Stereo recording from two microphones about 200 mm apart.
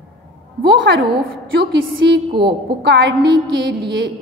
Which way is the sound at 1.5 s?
55° right (ahead or behind).